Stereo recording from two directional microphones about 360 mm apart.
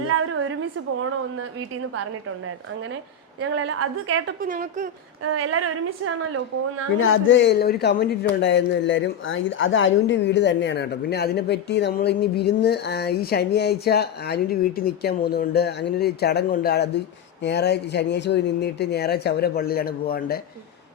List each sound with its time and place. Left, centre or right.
0.1 s a sound: right
3.4 s a woman's voice: right
4.4 s a woman's voice: right
5.2 s a woman's voice: right
7.0 s speech: left